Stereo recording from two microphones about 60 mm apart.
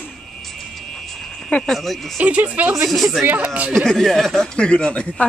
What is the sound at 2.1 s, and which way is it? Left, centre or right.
Speech, right.